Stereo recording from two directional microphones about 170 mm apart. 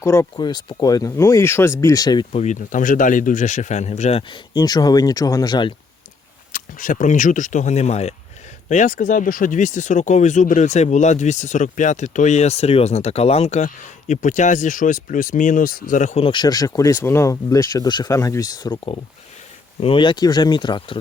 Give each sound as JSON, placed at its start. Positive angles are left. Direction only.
{"t": 0.0, "sound": "speech", "side_deg": 15}
{"t": 2.3, "sound": "speech", "side_deg": 45}
{"t": 4.3, "sound": "speech", "side_deg": 25}
{"t": 6.5, "sound": "speech", "side_deg": 50}
{"t": 16.2, "sound": "speech", "side_deg": 25}
{"t": 19.8, "sound": "speech", "side_deg": 30}